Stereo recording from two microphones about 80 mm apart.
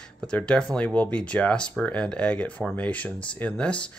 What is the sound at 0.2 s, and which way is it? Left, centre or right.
Speech, centre.